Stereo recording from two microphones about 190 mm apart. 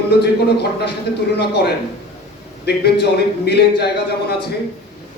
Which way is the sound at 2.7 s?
60° left (ahead or behind).